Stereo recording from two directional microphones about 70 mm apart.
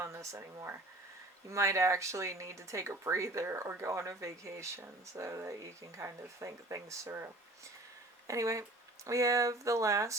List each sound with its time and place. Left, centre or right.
0.0 s speech: right
8.3 s speech: right